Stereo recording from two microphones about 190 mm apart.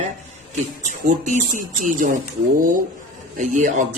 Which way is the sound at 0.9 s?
40° right (ahead or behind).